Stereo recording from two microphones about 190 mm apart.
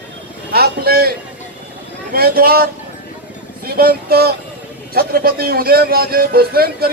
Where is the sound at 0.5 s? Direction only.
55° right (ahead or behind).